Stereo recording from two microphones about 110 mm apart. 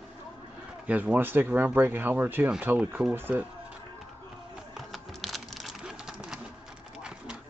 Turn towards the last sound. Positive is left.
turn(degrees=-5)  # may be behind; listen again after turning